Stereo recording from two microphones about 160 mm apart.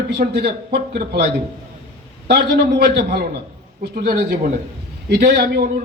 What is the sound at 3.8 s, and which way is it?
Speech, 75° right (ahead or behind).